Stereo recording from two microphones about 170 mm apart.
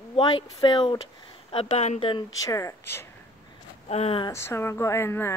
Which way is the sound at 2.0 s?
25° left (ahead or behind).